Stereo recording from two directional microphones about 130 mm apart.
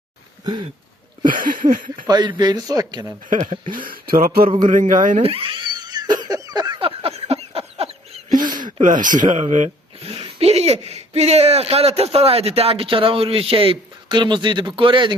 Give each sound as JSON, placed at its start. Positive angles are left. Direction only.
{"t": 1.2, "sound": "a sound", "side_deg": -90}
{"t": 2.0, "sound": "speech", "side_deg": -35}
{"t": 3.2, "sound": "speech", "side_deg": -80}
{"t": 4.6, "sound": "a sound", "side_deg": -85}
{"t": 5.1, "sound": "cat", "side_deg": -45}
{"t": 8.8, "sound": "speech", "side_deg": -90}
{"t": 10.1, "sound": "speech", "side_deg": -45}